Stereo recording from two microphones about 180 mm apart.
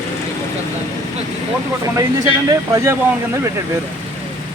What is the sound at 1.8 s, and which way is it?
Speech, 20° right (ahead or behind).